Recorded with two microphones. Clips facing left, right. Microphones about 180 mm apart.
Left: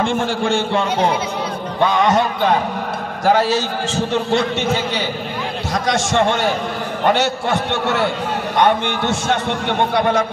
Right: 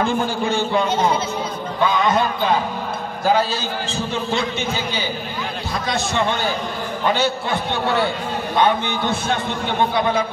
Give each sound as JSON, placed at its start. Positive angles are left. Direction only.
{"t": 0.0, "sound": "a man's voice", "side_deg": 90}
{"t": 5.7, "sound": "a man's voice", "side_deg": 85}